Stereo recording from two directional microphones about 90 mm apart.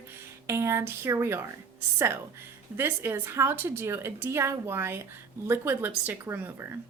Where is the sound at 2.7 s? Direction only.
25° right (ahead or behind).